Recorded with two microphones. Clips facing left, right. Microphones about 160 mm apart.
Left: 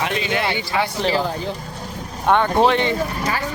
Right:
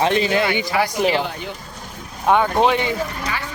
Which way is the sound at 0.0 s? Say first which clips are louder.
Right 5 dB; 30° right (ahead or behind).